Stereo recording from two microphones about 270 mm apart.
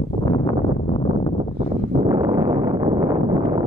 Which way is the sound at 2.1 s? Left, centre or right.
Centre.